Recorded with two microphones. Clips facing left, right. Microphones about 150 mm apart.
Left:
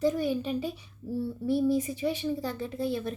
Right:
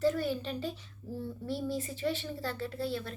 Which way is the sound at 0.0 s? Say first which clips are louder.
Left 3 dB; 15° left (ahead or behind).